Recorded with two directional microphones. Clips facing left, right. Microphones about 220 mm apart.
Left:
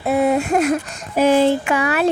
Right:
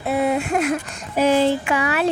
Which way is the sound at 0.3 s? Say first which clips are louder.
Left 3 dB; 40° left (ahead or behind).